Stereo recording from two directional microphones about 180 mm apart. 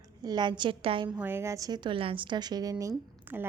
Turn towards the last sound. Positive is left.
turn(degrees=-10)  # may be behind; listen again after turning